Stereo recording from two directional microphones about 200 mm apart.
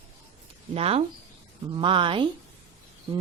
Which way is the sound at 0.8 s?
30° right (ahead or behind).